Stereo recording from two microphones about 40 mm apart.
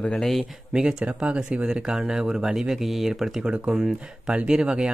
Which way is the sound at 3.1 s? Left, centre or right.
Centre.